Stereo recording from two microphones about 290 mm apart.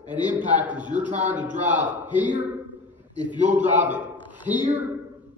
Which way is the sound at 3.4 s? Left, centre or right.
Centre.